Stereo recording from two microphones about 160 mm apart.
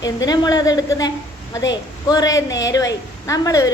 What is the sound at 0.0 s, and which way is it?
A woman's voice, 25° left (ahead or behind).